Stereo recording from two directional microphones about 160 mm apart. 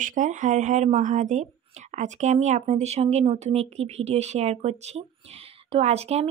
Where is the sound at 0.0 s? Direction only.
55° right (ahead or behind).